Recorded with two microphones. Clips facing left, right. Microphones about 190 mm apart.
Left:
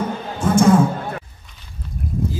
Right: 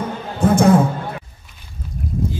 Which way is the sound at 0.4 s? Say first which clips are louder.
Right 3 dB; 60° right (ahead or behind).